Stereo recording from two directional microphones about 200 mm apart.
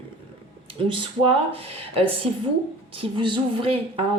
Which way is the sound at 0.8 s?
25° right (ahead or behind).